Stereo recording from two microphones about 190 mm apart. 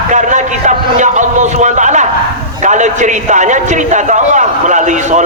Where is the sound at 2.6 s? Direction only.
40° right (ahead or behind).